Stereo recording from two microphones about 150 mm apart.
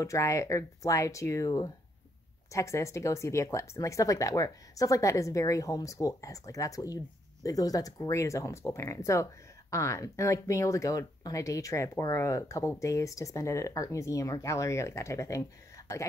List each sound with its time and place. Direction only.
0.0 s speech: 20° left (ahead or behind)